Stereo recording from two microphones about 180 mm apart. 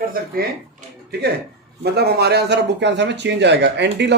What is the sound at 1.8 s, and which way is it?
Speech, 65° right (ahead or behind).